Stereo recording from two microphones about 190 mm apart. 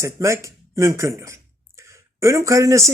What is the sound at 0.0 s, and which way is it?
A man's voice, 15° right (ahead or behind).